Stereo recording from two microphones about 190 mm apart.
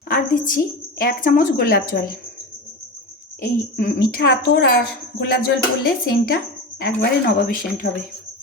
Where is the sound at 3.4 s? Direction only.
55° left (ahead or behind).